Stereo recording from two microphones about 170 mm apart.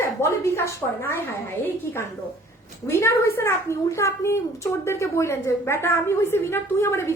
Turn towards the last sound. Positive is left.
turn(degrees=15)  # may be behind; listen again after turning